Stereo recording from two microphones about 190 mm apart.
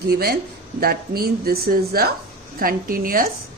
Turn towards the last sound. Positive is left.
turn(degrees=-50)  # may be behind; listen again after turning